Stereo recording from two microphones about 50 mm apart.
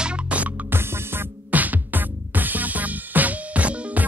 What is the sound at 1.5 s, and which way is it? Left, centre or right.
Music, right.